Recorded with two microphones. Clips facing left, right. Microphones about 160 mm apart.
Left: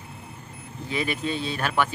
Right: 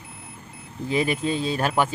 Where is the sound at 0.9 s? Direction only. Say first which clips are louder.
Right 4 dB; 35° right (ahead or behind).